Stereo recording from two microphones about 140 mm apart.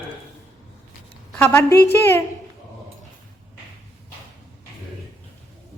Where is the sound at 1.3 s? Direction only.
15° left (ahead or behind).